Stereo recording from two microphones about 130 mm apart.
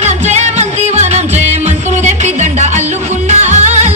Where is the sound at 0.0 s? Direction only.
60° right (ahead or behind).